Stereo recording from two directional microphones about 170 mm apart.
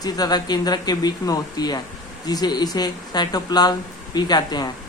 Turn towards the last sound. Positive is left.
turn(degrees=25)  # may be behind; listen again after turning